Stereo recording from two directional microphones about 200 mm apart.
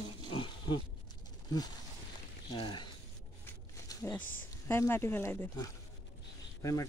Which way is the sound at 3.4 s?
15° left (ahead or behind).